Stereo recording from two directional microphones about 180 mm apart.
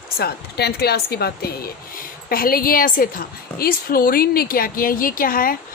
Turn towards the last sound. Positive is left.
turn(degrees=50)  # may be behind; listen again after turning